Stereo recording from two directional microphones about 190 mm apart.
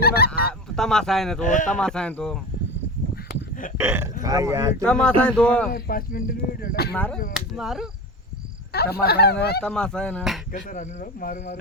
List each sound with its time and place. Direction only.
0.0 s goose: 55° left (ahead or behind)
0.4 s speech: 5° left (ahead or behind)
1.5 s speech: 40° left (ahead or behind)
1.7 s speech: 5° left (ahead or behind)
3.2 s a sound: 45° left (ahead or behind)
3.8 s speech: 15° right (ahead or behind)
4.8 s speech: 5° left (ahead or behind)
5.7 s speech: 50° left (ahead or behind)
6.9 s speech: 5° left (ahead or behind)
8.7 s fowl: 55° left (ahead or behind)
9.6 s speech: 5° left (ahead or behind)
10.5 s speech: 45° left (ahead or behind)